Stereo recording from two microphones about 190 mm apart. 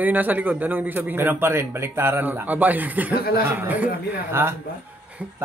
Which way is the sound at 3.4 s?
10° right (ahead or behind).